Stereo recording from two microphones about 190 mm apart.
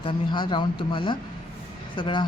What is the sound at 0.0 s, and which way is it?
Speech, 25° left (ahead or behind).